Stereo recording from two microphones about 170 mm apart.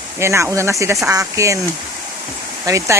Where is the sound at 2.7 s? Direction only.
15° right (ahead or behind).